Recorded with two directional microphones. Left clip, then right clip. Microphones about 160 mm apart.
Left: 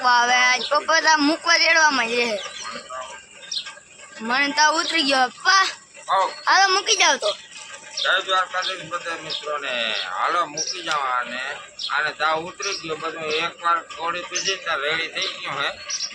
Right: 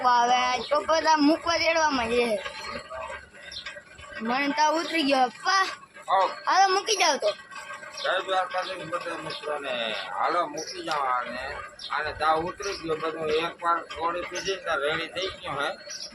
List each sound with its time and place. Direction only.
0.0 s a sound: 10° left (ahead or behind)
0.9 s a man's voice: 5° left (ahead or behind)
4.3 s speech: 5° left (ahead or behind)
5.4 s child singing: 20° left (ahead or behind)
6.1 s a man's voice: 15° left (ahead or behind)
8.0 s a man's voice: centre (ahead or behind)
14.4 s a man's voice: 15° right (ahead or behind)